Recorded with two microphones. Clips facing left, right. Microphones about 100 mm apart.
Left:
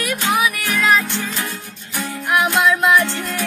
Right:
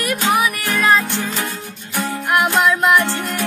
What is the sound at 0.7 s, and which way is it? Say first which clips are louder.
Music: right 2 dB; 20° right (ahead or behind).